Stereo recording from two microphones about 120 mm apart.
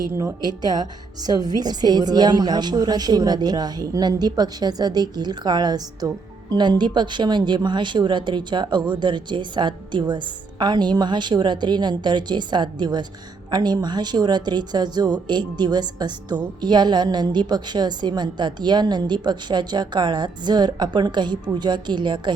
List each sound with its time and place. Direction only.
0.1 s a woman's voice: 20° right (ahead or behind)
0.4 s speech: 35° right (ahead or behind)